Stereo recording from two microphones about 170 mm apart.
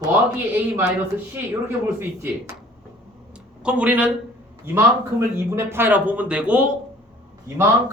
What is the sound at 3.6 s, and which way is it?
A man's voice, 10° right (ahead or behind).